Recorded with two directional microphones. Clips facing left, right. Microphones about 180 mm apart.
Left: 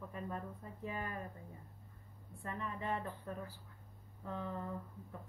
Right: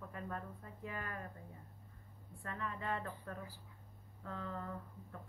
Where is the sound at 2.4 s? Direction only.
15° left (ahead or behind).